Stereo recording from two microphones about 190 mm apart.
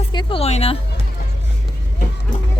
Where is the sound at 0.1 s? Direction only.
25° left (ahead or behind).